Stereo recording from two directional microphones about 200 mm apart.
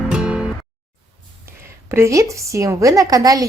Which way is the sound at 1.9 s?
15° right (ahead or behind).